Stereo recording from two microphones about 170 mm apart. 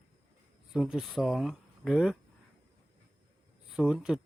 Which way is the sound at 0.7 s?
5° right (ahead or behind).